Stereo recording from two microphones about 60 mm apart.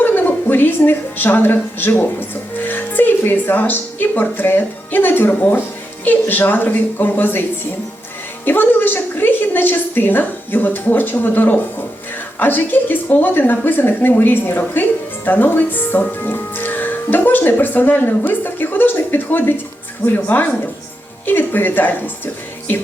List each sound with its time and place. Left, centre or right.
0.0 s a woman's voice: left
8.4 s a woman's voice: left